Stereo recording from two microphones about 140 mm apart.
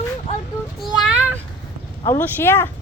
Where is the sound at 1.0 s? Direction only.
10° right (ahead or behind).